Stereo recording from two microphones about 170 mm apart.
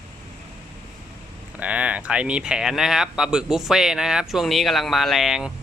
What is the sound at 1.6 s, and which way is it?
Speech, 10° right (ahead or behind).